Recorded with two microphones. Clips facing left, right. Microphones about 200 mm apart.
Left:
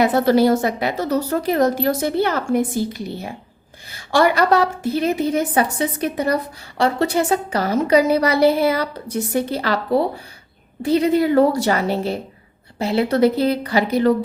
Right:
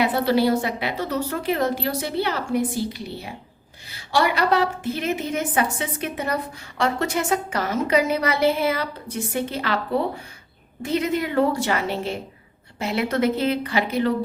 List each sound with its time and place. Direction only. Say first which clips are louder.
0.0 s a woman's voice: left 5 dB; 45° left (ahead or behind)